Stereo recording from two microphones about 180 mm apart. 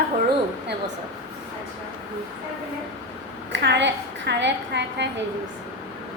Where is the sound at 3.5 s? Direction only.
80° right.